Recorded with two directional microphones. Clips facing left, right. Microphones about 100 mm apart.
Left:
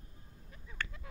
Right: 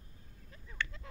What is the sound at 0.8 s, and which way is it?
Speech, 45° left (ahead or behind).